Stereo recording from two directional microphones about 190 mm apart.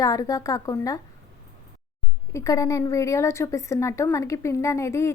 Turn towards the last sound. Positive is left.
turn(degrees=15)  # may be behind; listen again after turning